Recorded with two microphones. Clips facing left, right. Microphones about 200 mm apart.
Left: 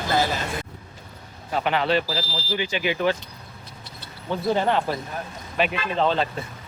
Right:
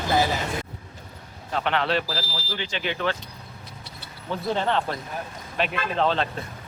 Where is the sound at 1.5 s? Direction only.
5° left (ahead or behind).